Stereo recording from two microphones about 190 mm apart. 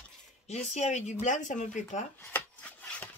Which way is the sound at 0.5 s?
35° left (ahead or behind).